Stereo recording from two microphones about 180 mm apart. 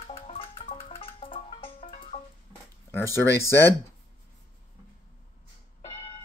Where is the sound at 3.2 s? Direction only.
15° left (ahead or behind).